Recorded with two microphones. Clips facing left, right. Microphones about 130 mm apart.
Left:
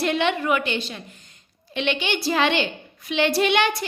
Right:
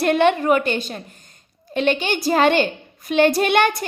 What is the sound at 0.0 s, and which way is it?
A woman's voice, 50° right (ahead or behind).